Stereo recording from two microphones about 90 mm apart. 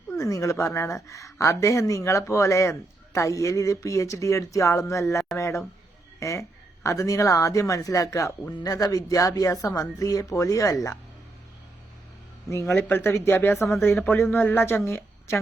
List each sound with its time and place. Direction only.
0.1 s a woman's voice: 35° left (ahead or behind)
12.7 s speech: 25° left (ahead or behind)
14.8 s a sound: 30° left (ahead or behind)